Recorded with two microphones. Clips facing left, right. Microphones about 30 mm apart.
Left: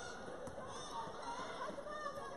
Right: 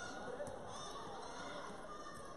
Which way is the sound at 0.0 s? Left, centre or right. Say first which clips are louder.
Right 2 dB; centre.